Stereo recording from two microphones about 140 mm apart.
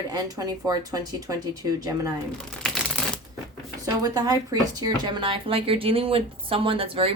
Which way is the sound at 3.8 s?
25° right (ahead or behind).